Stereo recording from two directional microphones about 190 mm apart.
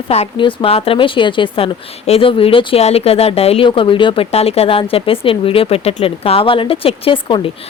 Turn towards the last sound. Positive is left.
turn(degrees=25)  # may be behind; listen again after turning